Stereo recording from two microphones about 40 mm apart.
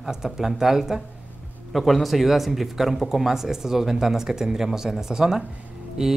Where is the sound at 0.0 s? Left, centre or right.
Centre.